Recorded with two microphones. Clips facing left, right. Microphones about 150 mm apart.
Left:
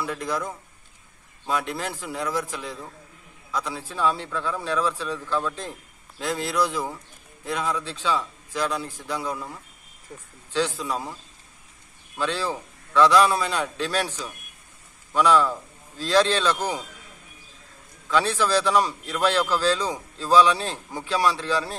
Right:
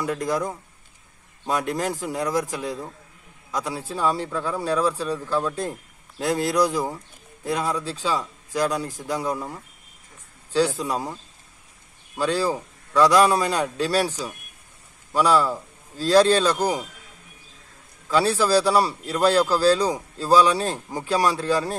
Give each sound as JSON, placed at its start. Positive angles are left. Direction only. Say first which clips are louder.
{"t": 0.0, "sound": "speech", "louder": "right 4 dB", "side_deg": -40}
{"t": 1.5, "sound": "a man's voice", "louder": "right 3 dB", "side_deg": -40}
{"t": 10.5, "sound": "a man's voice", "louder": "right 4 dB", "side_deg": -40}
{"t": 12.2, "sound": "a man's voice", "louder": "right 4 dB", "side_deg": -40}
{"t": 18.1, "sound": "a man's voice", "louder": "right 3 dB", "side_deg": -35}